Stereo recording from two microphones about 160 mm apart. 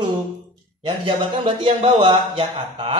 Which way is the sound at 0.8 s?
30° right (ahead or behind).